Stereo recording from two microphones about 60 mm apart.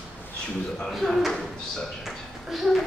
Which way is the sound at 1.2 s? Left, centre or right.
Centre.